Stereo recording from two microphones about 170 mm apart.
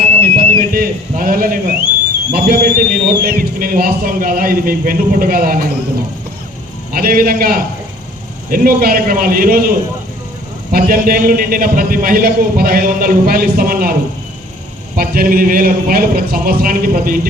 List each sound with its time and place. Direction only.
0.3 s a sound: 60° right (ahead or behind)
2.3 s a man's voice: 60° right (ahead or behind)
6.9 s a man's voice: 60° right (ahead or behind)
10.7 s a man's voice: 55° right (ahead or behind)
14.9 s a man's voice: 60° right (ahead or behind)